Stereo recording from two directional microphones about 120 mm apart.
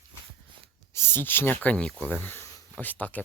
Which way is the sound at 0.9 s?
20° left (ahead or behind).